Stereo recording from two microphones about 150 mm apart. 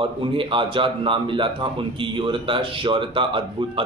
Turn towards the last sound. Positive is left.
turn(degrees=-35)  # may be behind; listen again after turning